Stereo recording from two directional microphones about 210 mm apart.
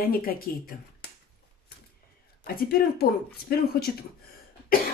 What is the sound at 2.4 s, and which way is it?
Speech, 45° left (ahead or behind).